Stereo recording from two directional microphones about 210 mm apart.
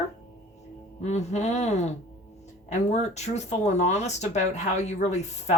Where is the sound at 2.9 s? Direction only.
30° left (ahead or behind).